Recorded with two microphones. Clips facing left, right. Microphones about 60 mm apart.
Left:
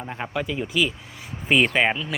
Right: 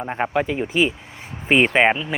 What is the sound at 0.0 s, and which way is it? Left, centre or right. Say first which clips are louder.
Speech: right 7 dB; right.